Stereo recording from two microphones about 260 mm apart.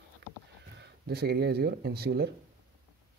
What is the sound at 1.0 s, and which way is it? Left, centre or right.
Speech, right.